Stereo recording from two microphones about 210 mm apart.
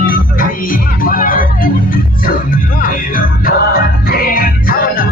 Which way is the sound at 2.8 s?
45° left (ahead or behind).